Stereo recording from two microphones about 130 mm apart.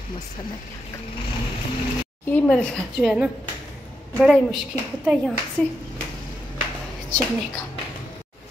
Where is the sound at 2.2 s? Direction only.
10° left (ahead or behind).